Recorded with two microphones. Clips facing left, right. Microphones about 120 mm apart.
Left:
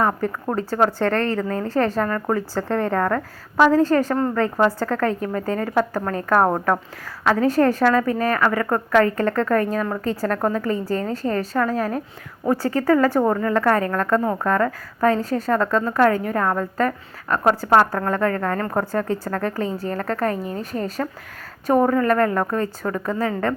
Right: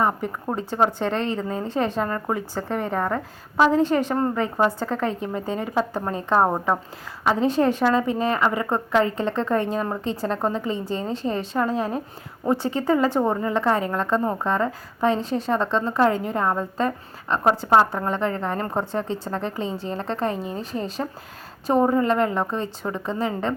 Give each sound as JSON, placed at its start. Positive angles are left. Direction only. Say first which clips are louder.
{"t": 0.0, "sound": "a woman's voice", "louder": "left 2 dB", "side_deg": -20}